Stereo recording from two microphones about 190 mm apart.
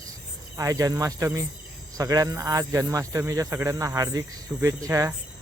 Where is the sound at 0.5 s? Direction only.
15° right (ahead or behind).